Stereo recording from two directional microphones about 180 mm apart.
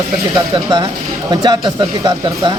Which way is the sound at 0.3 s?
20° right (ahead or behind).